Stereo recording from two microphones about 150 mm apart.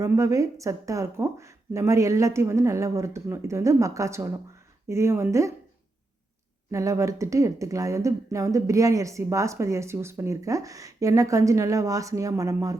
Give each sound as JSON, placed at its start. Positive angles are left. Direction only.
{"t": 0.0, "sound": "speech", "side_deg": -20}
{"t": 6.7, "sound": "speech", "side_deg": -20}